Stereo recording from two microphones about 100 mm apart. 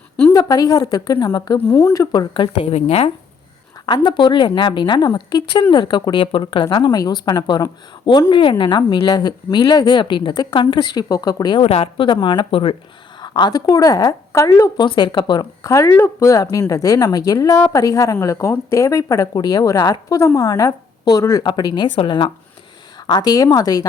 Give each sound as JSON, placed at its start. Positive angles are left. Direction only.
{"t": 0.3, "sound": "a woman's voice", "side_deg": 40}
{"t": 1.5, "sound": "speech", "side_deg": 20}
{"t": 1.8, "sound": "a woman's voice", "side_deg": 35}
{"t": 2.5, "sound": "a woman's voice", "side_deg": 85}
{"t": 3.8, "sound": "speech", "side_deg": 50}
{"t": 11.6, "sound": "a woman's voice", "side_deg": 80}
{"t": 13.2, "sound": "a woman's voice", "side_deg": 50}
{"t": 14.8, "sound": "a woman's voice", "side_deg": 50}